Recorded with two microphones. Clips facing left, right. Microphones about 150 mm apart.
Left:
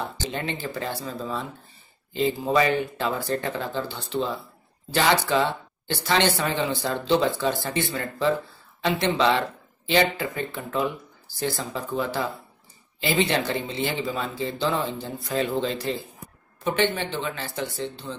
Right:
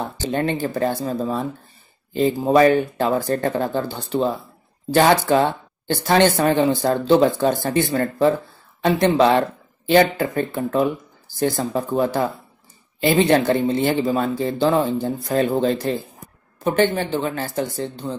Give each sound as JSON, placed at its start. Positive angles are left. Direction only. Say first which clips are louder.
{"t": 0.3, "sound": "speech", "louder": "right 13 dB", "side_deg": -45}